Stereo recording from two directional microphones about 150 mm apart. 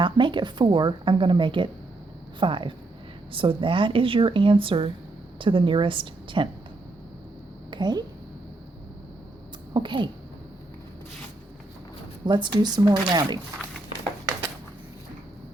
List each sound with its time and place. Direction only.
0.0 s a woman's voice: 35° right (ahead or behind)
7.7 s a woman's voice: 30° right (ahead or behind)
9.7 s a woman's voice: 30° right (ahead or behind)
12.2 s speech: 30° right (ahead or behind)